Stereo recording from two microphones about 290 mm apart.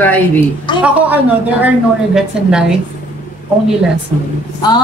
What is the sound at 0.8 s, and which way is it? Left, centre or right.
Speech, centre.